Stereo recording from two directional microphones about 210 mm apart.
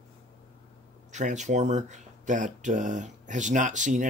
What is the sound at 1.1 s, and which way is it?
Speech, 35° right (ahead or behind).